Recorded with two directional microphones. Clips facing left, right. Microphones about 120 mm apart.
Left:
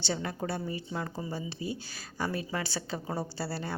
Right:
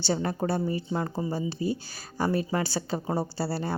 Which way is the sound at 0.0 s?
35° right (ahead or behind).